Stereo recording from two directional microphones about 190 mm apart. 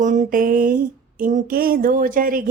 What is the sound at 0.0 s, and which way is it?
Speech, 40° right (ahead or behind).